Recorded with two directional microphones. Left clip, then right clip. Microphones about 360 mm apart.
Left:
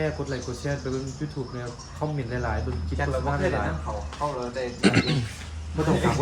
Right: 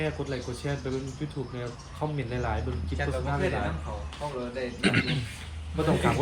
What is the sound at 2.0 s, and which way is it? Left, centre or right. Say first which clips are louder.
Speech: left 2 dB; centre.